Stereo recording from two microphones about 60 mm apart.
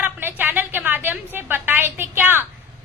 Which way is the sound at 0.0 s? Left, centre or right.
Right.